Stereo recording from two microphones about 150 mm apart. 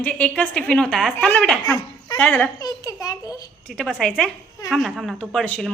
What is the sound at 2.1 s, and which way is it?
Speech, 5° left (ahead or behind).